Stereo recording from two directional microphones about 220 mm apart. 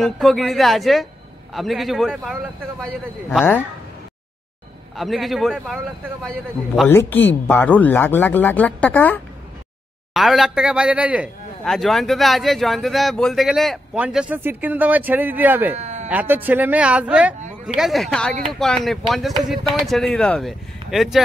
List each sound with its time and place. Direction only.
0.0 s speech: centre (ahead or behind)
4.9 s speech: centre (ahead or behind)
6.8 s speech: 10° left (ahead or behind); by 15.7 s 10° right (ahead or behind)
15.8 s a sound: 30° right (ahead or behind)
16.1 s speech: 5° right (ahead or behind)